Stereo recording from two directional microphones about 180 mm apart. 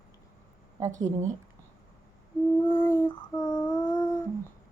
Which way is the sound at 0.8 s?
15° right (ahead or behind).